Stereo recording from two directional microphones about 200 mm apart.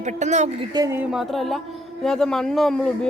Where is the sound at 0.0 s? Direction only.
35° right (ahead or behind).